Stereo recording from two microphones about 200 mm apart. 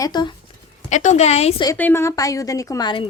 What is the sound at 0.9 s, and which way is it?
Speech, 35° left (ahead or behind).